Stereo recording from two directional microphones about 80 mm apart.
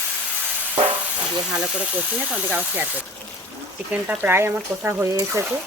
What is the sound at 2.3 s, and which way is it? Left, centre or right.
Speech, centre.